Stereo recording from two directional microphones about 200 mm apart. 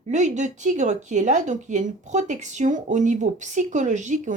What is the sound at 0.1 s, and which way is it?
Speech, 35° right (ahead or behind).